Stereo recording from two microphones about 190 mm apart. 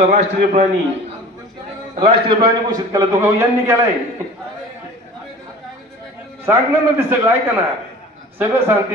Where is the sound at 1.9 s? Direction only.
25° right (ahead or behind).